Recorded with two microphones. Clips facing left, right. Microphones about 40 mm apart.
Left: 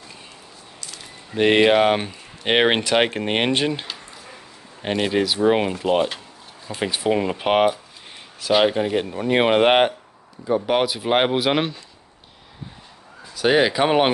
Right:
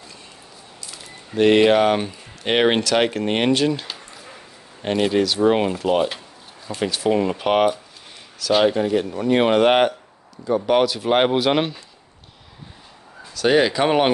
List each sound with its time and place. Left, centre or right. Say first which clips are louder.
1.3 s speech: right 1 dB; centre
4.8 s speech: right 2 dB; centre
6.7 s speech: right 1 dB; centre
13.3 s speech: right 1 dB; centre